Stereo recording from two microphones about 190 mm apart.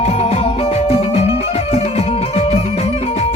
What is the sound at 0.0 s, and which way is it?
Music, 35° left (ahead or behind).